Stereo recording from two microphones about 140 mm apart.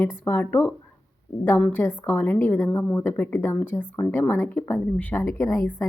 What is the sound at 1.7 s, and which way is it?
A woman's voice, 15° left (ahead or behind).